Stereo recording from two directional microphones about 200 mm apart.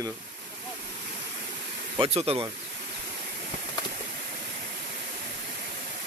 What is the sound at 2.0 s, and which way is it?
Speech, 30° right (ahead or behind).